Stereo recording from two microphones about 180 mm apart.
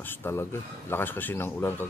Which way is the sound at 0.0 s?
10° left (ahead or behind).